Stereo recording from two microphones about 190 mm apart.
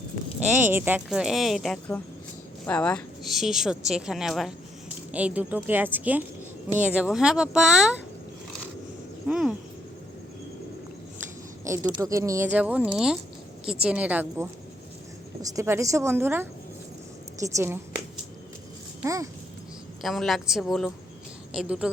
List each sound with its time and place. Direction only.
0.3 s a woman's voice: 5° right (ahead or behind)
9.2 s a woman's voice: 5° right (ahead or behind)
11.6 s speech: 15° right (ahead or behind)
19.0 s speech: 15° right (ahead or behind)
20.0 s a woman's voice: centre (ahead or behind)